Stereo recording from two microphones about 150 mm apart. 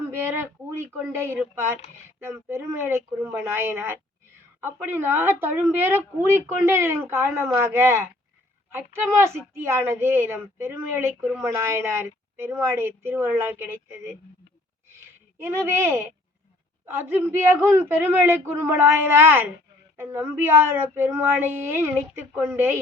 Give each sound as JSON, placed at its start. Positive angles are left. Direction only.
{"t": 0.0, "sound": "a woman's voice", "side_deg": -15}
{"t": 14.8, "sound": "a sound", "side_deg": -15}
{"t": 16.8, "sound": "a woman's voice", "side_deg": -15}